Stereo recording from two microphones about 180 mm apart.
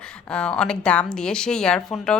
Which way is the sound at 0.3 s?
5° left (ahead or behind).